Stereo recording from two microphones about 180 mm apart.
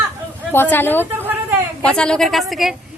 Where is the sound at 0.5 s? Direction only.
10° left (ahead or behind).